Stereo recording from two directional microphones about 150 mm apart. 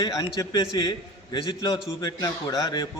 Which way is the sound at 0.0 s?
25° left (ahead or behind).